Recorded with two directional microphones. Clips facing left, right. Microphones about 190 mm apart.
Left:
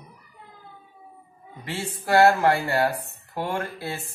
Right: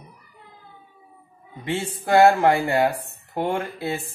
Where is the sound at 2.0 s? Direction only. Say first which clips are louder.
Right 2 dB; 20° right (ahead or behind).